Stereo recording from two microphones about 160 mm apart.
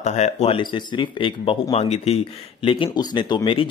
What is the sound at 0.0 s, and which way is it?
Speech, 45° left (ahead or behind).